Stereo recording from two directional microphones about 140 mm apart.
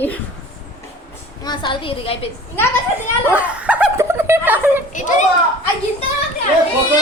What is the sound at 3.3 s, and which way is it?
Speech, 10° right (ahead or behind).